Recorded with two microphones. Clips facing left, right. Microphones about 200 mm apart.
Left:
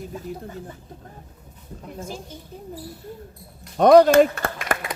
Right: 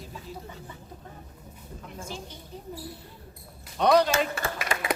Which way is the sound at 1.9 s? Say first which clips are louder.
Left 5 dB; 40° left (ahead or behind).